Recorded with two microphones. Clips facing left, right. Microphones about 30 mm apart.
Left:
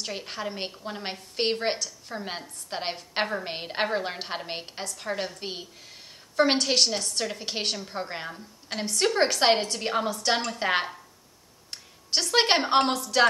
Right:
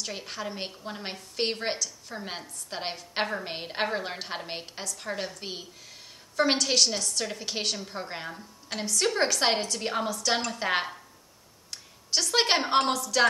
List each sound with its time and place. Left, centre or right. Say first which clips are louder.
0.0 s a woman's voice: left 2 dB; centre
9.4 s a woman's voice: left 4 dB; centre
10.0 s a woman's voice: left 3 dB; left
10.4 s a woman's voice: left 2 dB; centre
11.7 s a sound: left 1 dB; left
12.3 s a woman's voice: left 3 dB; centre